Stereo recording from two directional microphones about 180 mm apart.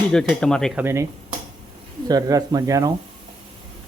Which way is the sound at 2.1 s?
20° right (ahead or behind).